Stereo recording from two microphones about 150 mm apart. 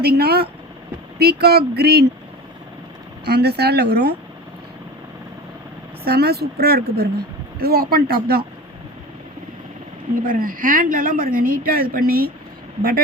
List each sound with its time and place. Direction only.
0.0 s speech: 90° right
3.2 s speech: 90° right
6.1 s speech: 90° right
10.2 s speech: 65° right (ahead or behind); by 12.3 s 85° right